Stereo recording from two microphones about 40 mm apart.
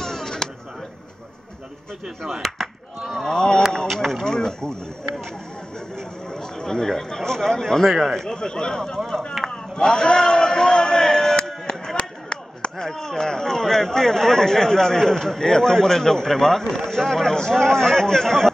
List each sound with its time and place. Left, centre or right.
0.0 s a sound: centre
3.1 s speech: centre
3.3 s speech: centre
3.7 s speech: centre
5.9 s speech: centre
8.4 s speech: centre
9.5 s a sound: centre
12.8 s speech: centre